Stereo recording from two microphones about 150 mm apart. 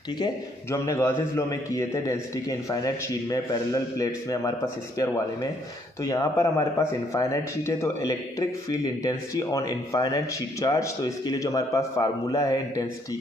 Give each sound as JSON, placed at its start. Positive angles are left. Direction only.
{"t": 0.2, "sound": "speech", "side_deg": 20}